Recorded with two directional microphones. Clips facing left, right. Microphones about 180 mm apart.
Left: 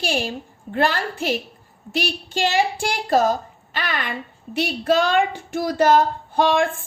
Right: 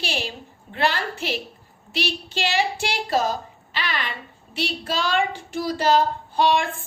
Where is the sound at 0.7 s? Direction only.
45° left (ahead or behind).